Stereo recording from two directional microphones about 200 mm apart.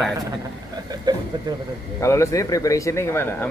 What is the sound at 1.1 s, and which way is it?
Speech, 20° right (ahead or behind).